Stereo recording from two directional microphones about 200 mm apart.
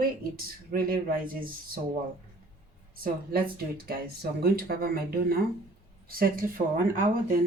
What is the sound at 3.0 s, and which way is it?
Speech, 45° right (ahead or behind).